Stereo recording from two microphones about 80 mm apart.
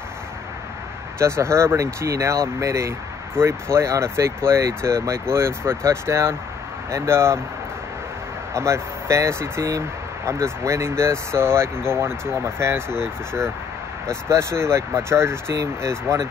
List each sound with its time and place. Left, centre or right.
1.2 s speech: right
8.5 s speech: right
14.3 s speech: right